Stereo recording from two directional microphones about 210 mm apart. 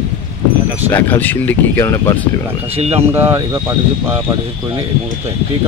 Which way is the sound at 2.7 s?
30° right (ahead or behind).